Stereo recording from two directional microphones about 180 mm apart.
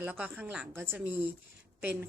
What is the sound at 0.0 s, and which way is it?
Speech, 10° right (ahead or behind).